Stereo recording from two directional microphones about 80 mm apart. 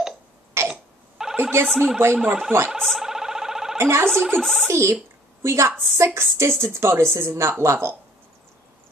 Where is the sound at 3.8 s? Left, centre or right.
Right.